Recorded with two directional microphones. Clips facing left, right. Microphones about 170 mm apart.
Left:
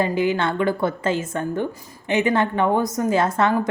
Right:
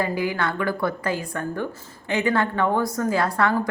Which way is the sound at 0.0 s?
20° left (ahead or behind).